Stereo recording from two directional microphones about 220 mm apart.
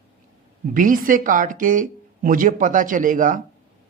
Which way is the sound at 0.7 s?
40° right (ahead or behind).